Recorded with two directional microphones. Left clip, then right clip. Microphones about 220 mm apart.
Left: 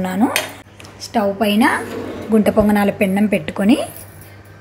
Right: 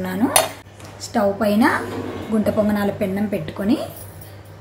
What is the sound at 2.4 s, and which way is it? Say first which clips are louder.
A woman's voice: left 4 dB; 30° left (ahead or behind).